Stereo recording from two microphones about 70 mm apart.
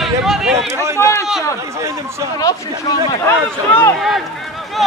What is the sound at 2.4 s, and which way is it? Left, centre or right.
Speech, left.